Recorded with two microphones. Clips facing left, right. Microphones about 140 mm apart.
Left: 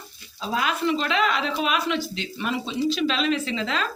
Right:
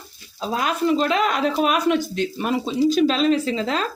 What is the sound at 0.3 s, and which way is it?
A woman's voice, 40° right (ahead or behind).